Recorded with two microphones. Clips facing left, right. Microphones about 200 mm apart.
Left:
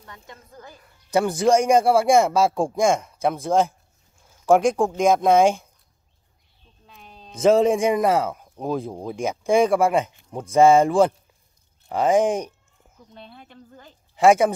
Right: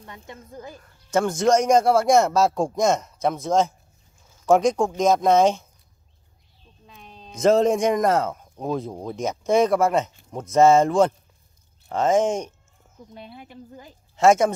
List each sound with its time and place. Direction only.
0.0 s speech: 20° right (ahead or behind)
0.7 s speech: 10° left (ahead or behind)
6.9 s speech: centre (ahead or behind)
13.1 s speech: 10° right (ahead or behind)
14.1 s a woman's voice: 10° left (ahead or behind)